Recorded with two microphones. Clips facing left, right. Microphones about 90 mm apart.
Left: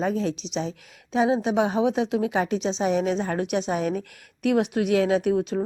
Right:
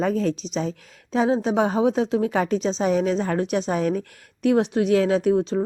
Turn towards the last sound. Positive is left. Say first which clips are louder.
# right 3 dB
turn(degrees=-30)  # may be behind; listen again after turning